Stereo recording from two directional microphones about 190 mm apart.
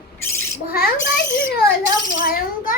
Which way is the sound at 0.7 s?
50° left (ahead or behind).